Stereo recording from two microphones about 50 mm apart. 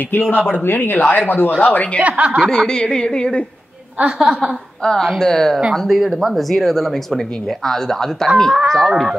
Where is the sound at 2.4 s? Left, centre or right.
Centre.